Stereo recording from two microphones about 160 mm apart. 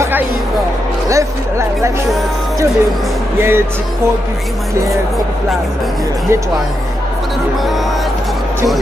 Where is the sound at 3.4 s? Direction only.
15° right (ahead or behind).